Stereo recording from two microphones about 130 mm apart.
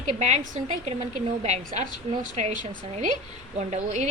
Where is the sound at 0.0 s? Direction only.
65° right (ahead or behind).